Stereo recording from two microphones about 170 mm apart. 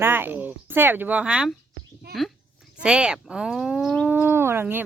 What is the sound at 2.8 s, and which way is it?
Speech, 5° right (ahead or behind).